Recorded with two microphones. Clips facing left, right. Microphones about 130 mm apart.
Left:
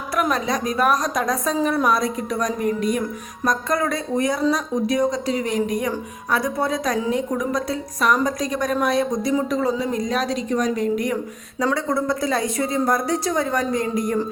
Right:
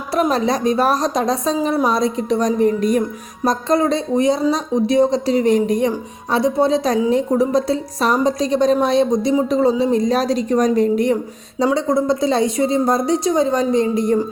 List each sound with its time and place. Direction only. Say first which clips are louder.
0.1 s a woman's voice: right 5 dB; 30° right (ahead or behind)